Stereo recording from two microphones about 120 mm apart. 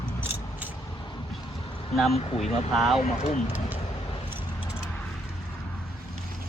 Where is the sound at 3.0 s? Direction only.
70° left (ahead or behind).